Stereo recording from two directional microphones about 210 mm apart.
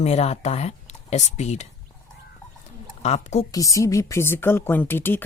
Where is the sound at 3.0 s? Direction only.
30° left (ahead or behind).